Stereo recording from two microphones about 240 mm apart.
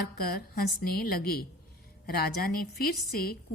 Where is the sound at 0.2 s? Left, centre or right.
Left.